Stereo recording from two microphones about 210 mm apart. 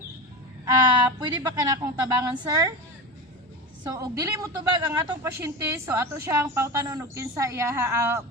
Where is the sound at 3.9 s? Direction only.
15° right (ahead or behind).